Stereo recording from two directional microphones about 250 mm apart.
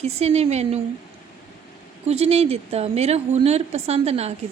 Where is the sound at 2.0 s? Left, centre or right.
Right.